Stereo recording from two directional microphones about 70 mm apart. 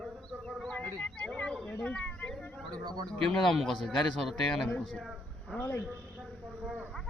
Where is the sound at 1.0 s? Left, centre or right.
Centre.